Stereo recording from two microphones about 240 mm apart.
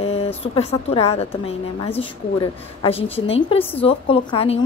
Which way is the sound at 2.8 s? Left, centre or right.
Left.